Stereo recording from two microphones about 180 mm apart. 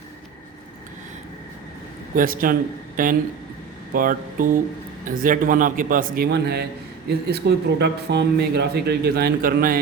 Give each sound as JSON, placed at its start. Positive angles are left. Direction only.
{"t": 2.1, "sound": "a man's voice", "side_deg": -50}